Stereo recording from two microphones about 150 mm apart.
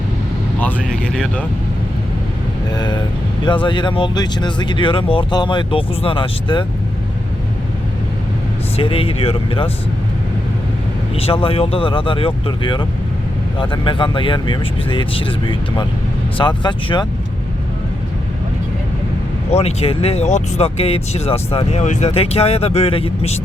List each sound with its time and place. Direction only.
0.6 s speech: 5° left (ahead or behind)
2.7 s speech: 30° left (ahead or behind)
8.7 s speech: 40° left (ahead or behind)
11.1 s speech: 40° left (ahead or behind)
19.5 s speech: 45° left (ahead or behind)